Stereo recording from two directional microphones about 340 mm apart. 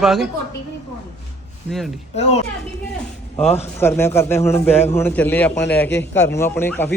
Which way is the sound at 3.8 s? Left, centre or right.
Centre.